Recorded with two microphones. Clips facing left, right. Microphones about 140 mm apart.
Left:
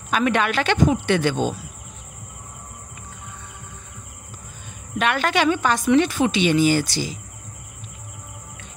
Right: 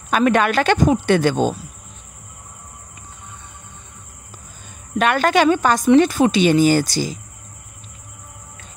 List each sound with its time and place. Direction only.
0.1 s speech: 45° right (ahead or behind)
4.9 s speech: 45° right (ahead or behind)